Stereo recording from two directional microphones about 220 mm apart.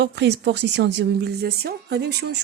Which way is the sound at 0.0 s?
50° right (ahead or behind).